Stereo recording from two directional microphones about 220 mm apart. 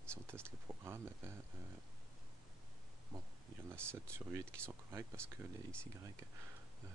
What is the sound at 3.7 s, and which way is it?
Speech, 10° right (ahead or behind).